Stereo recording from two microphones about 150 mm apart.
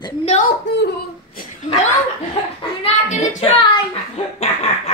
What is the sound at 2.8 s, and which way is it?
Child singing, 40° left (ahead or behind).